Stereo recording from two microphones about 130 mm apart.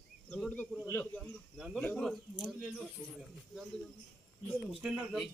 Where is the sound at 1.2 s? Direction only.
5° right (ahead or behind).